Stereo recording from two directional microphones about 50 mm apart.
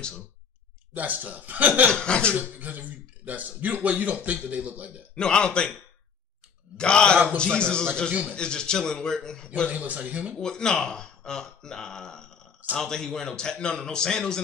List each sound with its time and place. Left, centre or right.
0.9 s speech: right
1.9 s a man's voice: centre
2.3 s speech: right
5.1 s a man's voice: centre
6.8 s a man's voice: centre
9.7 s speech: right
10.4 s speech: centre